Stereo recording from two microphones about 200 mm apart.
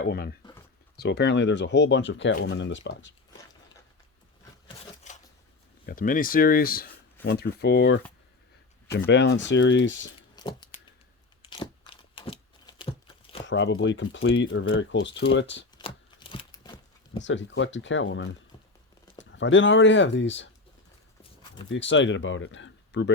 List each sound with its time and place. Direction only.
0.0 s speech: 50° left (ahead or behind); by 3.1 s 65° left (ahead or behind)
5.1 s shuffling cards: 35° left (ahead or behind)
5.8 s speech: 45° left (ahead or behind); by 10.1 s 65° left (ahead or behind)
10.3 s a sound: 20° left (ahead or behind)
13.4 s speech: 65° left (ahead or behind)
16.3 s crunch: 25° left (ahead or behind)
17.2 s speech: 70° left (ahead or behind)
21.7 s speech: 65° left (ahead or behind)